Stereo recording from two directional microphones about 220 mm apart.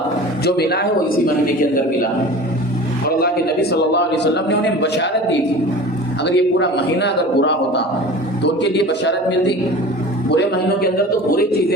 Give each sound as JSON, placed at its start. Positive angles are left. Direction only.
{"t": 0.4, "sound": "a man's voice", "side_deg": 45}
{"t": 3.2, "sound": "a man's voice", "side_deg": 45}
{"t": 6.2, "sound": "a man's voice", "side_deg": 50}
{"t": 8.8, "sound": "a man's voice", "side_deg": 50}
{"t": 10.9, "sound": "a man's voice", "side_deg": 40}